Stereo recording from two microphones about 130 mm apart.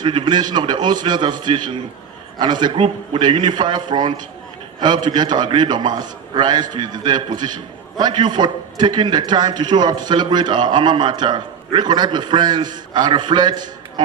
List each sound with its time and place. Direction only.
0.0 s a man's voice: 35° right (ahead or behind)